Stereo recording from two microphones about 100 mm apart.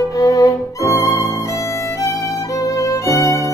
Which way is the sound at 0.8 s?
30° right (ahead or behind).